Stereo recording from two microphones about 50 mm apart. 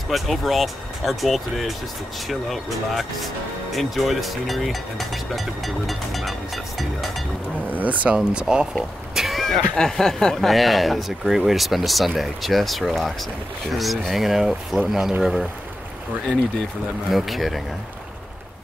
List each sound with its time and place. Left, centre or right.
0.1 s speech: centre
7.7 s speech: right
8.3 s speech: centre
9.1 s speech: centre
17.1 s speech: centre